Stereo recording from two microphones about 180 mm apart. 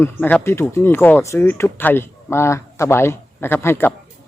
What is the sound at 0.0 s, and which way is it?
Speech, 10° left (ahead or behind).